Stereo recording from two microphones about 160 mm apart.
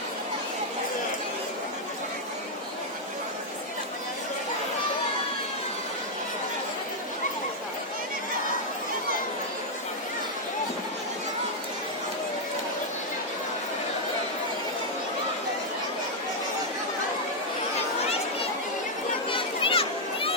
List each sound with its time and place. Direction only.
19.4 s children playing: 35° left (ahead or behind)